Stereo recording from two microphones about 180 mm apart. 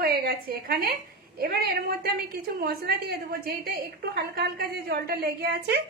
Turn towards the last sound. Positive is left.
turn(degrees=-65)  # may be behind; listen again after turning